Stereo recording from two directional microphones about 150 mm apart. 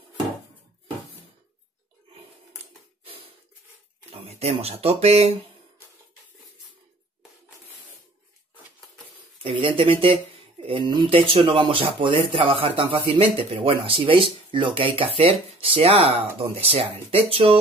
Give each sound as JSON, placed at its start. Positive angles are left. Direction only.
{"t": 3.0, "sound": "a sound", "side_deg": -40}
{"t": 4.1, "sound": "speech", "side_deg": -45}
{"t": 9.4, "sound": "speech", "side_deg": -35}